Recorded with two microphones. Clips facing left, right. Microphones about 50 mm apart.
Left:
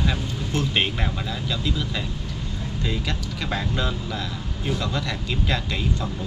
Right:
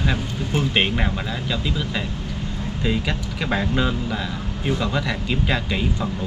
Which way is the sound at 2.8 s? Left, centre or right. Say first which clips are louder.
Right 5 dB; centre.